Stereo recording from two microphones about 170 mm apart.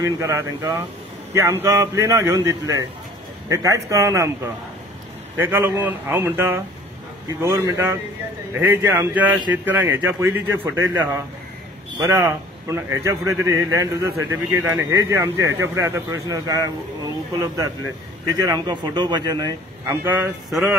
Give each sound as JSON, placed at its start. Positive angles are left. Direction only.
{"t": 0.0, "sound": "a man's voice", "side_deg": -15}
{"t": 5.4, "sound": "a man's voice", "side_deg": -10}
{"t": 18.2, "sound": "speech", "side_deg": -20}
{"t": 20.4, "sound": "speech", "side_deg": 0}